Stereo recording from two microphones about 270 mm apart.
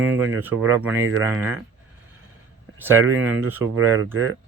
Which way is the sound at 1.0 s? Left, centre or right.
Right.